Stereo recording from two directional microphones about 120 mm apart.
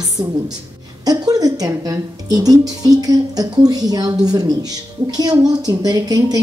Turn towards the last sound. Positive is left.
turn(degrees=-35)  # may be behind; listen again after turning